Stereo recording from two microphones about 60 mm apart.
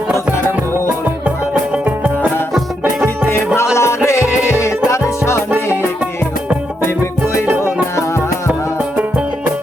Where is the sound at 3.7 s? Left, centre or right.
Left.